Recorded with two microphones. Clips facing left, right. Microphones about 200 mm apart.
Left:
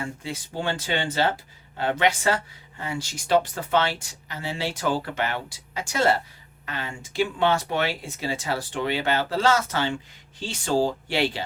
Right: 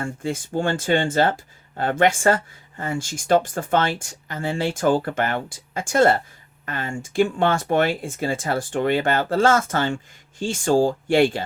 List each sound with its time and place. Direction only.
0.0 s speech: 50° right (ahead or behind)